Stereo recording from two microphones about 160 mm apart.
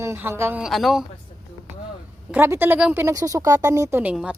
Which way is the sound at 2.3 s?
15° right (ahead or behind).